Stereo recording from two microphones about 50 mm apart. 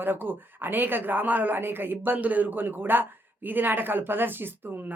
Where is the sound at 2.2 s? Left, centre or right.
Right.